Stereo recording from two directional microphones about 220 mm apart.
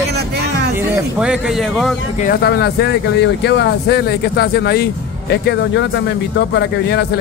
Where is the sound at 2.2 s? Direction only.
45° left (ahead or behind).